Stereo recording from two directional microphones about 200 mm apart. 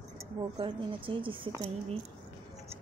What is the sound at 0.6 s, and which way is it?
Speech, 25° right (ahead or behind).